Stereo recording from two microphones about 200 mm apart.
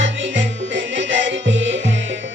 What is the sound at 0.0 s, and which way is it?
Music, 65° right (ahead or behind).